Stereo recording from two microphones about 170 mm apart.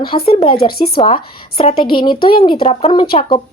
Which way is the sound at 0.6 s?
65° left (ahead or behind).